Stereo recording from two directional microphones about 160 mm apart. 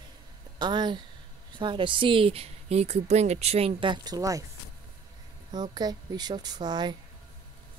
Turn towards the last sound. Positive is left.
turn(degrees=-25)  # may be behind; listen again after turning